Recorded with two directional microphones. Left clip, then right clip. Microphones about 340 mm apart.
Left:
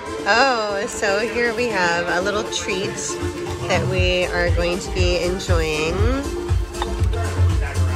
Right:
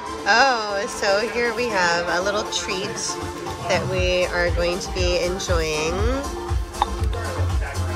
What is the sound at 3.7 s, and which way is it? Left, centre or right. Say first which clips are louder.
Speech: left 1 dB; centre.